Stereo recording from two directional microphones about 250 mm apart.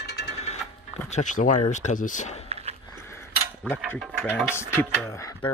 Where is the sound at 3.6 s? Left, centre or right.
Centre.